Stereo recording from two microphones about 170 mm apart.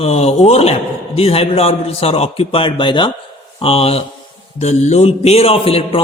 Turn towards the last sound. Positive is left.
turn(degrees=35)  # may be behind; listen again after turning